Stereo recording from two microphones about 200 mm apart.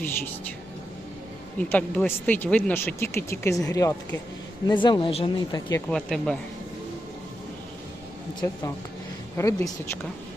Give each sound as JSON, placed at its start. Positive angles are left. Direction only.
{"t": 1.5, "sound": "speech", "side_deg": 10}
{"t": 5.9, "sound": "speech", "side_deg": 5}
{"t": 8.4, "sound": "speech", "side_deg": 15}